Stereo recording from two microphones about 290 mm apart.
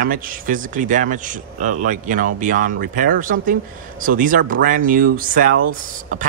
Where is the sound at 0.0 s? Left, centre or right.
Right.